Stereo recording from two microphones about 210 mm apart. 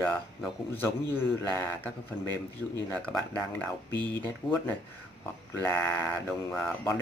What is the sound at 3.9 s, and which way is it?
Speech, 20° right (ahead or behind).